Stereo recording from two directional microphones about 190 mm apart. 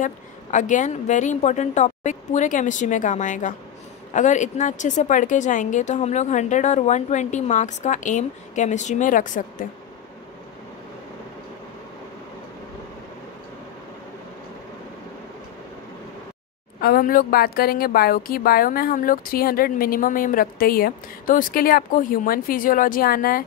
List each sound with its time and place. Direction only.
0.0 s a woman's voice: 40° left (ahead or behind)
16.8 s a woman's voice: 50° left (ahead or behind)